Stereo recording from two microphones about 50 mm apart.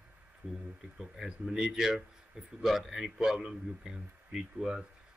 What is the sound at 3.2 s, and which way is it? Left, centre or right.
Speech, centre.